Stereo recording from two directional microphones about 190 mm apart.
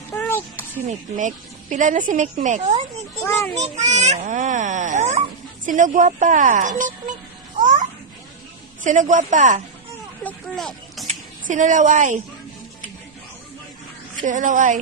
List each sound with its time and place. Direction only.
0.1 s a sound: 10° left (ahead or behind)
0.9 s a child's voice: 40° right (ahead or behind)
3.2 s a child's voice: 10° left (ahead or behind)
3.5 s a child's voice: 35° right (ahead or behind)
7.6 s babbling: 40° right (ahead or behind)
8.8 s a child's voice: 40° right (ahead or behind)
10.2 s speech: 5° left (ahead or behind)
11.0 s speech: 40° right (ahead or behind)
14.3 s a child's voice: 40° right (ahead or behind)